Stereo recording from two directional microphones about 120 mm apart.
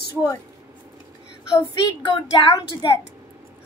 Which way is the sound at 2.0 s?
40° left (ahead or behind).